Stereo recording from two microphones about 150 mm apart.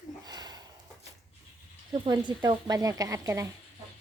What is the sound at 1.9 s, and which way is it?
A woman's voice, 35° right (ahead or behind).